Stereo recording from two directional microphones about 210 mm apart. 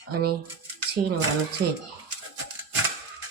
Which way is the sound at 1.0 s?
40° right (ahead or behind).